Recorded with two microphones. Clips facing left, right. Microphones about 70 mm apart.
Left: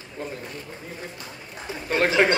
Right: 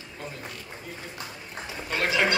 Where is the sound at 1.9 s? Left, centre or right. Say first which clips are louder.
Left 5 dB; left.